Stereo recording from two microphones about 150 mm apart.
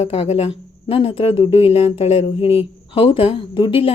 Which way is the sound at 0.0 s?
45° left (ahead or behind).